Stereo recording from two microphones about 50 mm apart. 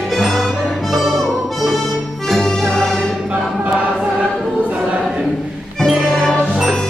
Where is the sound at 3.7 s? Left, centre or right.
Right.